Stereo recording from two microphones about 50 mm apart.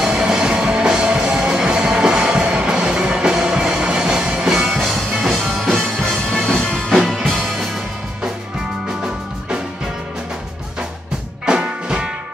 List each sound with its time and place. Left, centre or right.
0.1 s music: centre
11.4 s music: right